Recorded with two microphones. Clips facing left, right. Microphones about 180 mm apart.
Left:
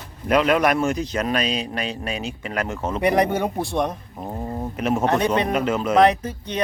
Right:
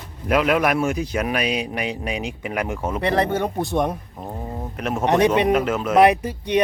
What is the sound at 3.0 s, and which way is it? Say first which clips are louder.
Speech: left 2 dB; 15° left (ahead or behind).